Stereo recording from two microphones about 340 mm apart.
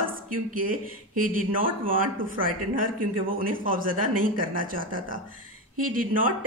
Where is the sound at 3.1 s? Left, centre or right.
Right.